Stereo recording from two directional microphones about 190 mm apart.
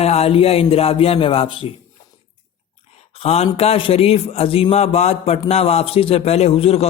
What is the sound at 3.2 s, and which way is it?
A man's voice, 30° left (ahead or behind).